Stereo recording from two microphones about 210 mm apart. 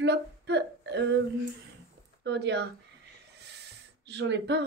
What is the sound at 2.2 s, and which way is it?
Speech, 55° right (ahead or behind).